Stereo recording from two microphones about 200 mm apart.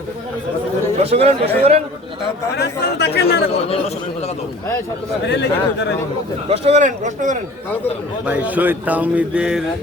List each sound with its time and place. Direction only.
1.1 s speech: 30° right (ahead or behind)
2.6 s speech: 55° left (ahead or behind)
5.2 s speech: 60° left (ahead or behind)
6.5 s speech: 35° right (ahead or behind)
8.3 s speech: 10° right (ahead or behind)